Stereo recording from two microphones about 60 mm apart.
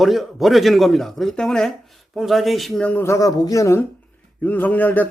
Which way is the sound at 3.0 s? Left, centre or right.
Left.